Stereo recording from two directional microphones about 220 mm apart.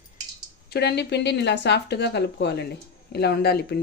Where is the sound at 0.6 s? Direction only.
50° left (ahead or behind).